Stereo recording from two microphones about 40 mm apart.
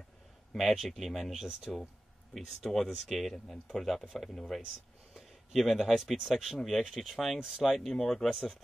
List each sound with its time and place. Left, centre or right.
0.6 s speech: centre
1.7 s speech: centre
2.3 s speech: centre
7.3 s speech: right
7.6 s speech: centre